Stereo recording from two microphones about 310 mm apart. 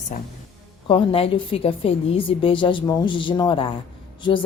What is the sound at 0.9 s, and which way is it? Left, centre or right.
A woman's voice, centre.